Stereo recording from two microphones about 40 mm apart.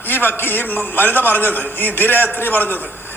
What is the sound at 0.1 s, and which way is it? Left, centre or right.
A man's voice, left.